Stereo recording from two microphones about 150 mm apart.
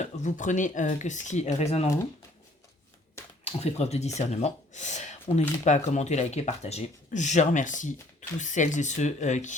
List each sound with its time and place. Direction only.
0.0 s speech: 55° left (ahead or behind)
3.4 s speech: 45° left (ahead or behind)